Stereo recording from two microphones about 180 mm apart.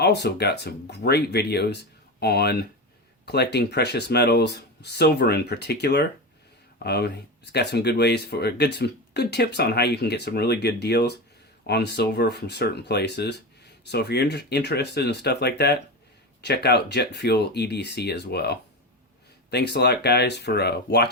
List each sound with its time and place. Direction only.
0.0 s speech: 65° left (ahead or behind)